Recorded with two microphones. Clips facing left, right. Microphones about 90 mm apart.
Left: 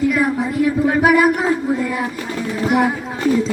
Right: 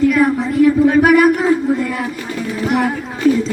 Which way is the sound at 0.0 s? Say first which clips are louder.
Right 4 dB; 15° left (ahead or behind).